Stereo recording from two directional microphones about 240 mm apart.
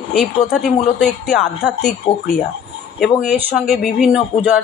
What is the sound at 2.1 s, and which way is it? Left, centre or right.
Speech, left.